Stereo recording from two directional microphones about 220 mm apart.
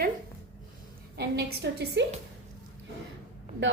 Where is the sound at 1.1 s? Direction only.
50° right (ahead or behind).